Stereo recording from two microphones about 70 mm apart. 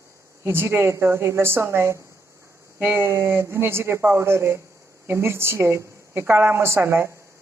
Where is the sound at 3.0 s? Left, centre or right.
Right.